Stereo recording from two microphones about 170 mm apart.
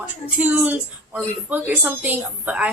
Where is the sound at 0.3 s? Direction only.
10° right (ahead or behind).